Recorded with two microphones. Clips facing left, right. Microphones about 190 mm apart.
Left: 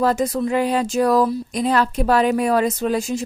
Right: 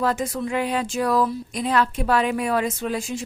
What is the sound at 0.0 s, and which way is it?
A woman's voice, 40° left (ahead or behind).